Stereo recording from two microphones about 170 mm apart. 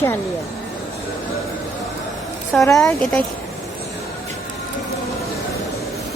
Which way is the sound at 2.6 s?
15° left (ahead or behind).